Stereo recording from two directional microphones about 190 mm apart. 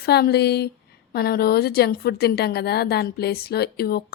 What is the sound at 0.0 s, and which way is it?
A woman's voice, 55° left (ahead or behind).